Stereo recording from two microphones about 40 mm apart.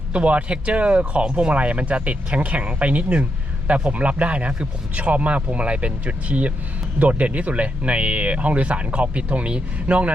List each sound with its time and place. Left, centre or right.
0.1 s speech: right